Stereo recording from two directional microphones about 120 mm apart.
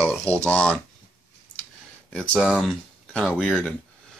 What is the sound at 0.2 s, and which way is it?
Speech, 10° left (ahead or behind).